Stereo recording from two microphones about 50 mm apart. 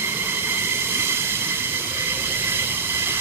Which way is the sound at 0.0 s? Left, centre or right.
Right.